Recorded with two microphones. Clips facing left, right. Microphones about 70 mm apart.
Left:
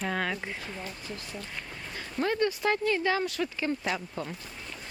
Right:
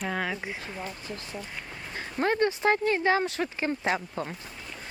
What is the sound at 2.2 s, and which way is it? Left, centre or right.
Speech, right.